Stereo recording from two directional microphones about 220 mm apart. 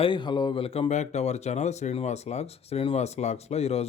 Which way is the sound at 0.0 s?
20° left (ahead or behind).